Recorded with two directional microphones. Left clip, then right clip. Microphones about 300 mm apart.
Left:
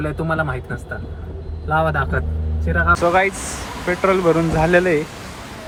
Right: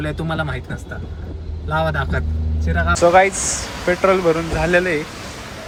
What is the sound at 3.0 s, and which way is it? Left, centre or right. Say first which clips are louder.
Speech: right 4 dB; centre.